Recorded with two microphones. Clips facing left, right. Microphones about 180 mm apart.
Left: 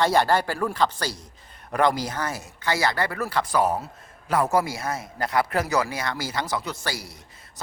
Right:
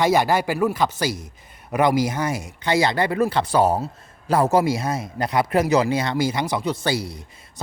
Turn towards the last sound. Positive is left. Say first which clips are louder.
# right 7 dB
turn(degrees=-60)  # may be behind; listen again after turning